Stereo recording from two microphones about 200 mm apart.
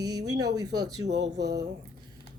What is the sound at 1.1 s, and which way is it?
Speech, 60° right (ahead or behind).